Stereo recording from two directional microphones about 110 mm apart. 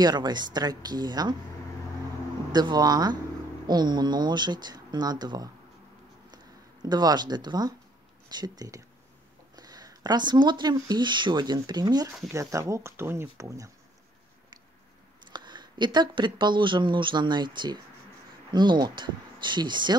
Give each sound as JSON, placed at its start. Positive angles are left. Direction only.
{"t": 0.0, "sound": "speech", "side_deg": -40}
{"t": 2.5, "sound": "speech", "side_deg": -40}
{"t": 12.3, "sound": "speech", "side_deg": -30}
{"t": 15.3, "sound": "speech", "side_deg": -40}